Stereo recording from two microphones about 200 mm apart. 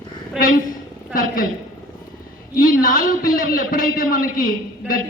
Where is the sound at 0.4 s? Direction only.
5° right (ahead or behind).